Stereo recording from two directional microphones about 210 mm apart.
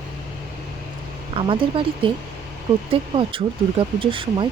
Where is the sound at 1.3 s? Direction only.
25° right (ahead or behind).